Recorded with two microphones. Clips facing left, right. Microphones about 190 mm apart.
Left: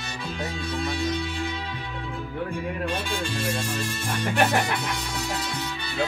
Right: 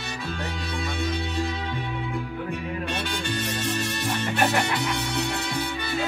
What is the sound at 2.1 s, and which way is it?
Music, 70° right (ahead or behind).